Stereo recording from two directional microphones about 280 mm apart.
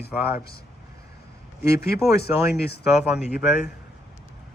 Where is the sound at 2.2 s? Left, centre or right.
Left.